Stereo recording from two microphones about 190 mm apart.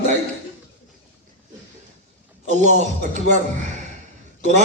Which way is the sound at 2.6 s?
40° right (ahead or behind).